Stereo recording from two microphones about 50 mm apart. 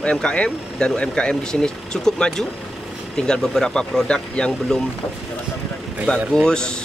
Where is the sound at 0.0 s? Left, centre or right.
Centre.